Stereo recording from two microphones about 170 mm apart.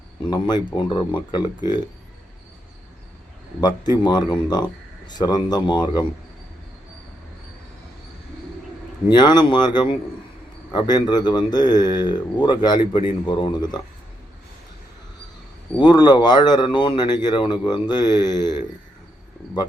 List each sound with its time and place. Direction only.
0.3 s a man's voice: 25° left (ahead or behind)
3.8 s a man's voice: 25° left (ahead or behind)
9.0 s a man's voice: 25° left (ahead or behind)
15.8 s a man's voice: 25° left (ahead or behind)